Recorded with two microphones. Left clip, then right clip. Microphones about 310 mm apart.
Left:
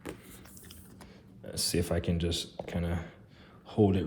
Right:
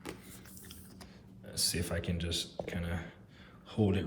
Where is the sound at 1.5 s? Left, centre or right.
Left.